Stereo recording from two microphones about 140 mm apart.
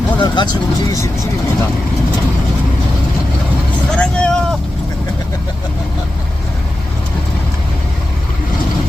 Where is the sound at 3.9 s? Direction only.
10° left (ahead or behind).